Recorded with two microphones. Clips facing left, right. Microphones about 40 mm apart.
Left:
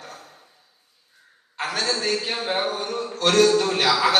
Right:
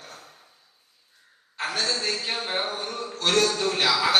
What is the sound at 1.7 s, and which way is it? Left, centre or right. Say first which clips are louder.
Speech: left 3 dB; left.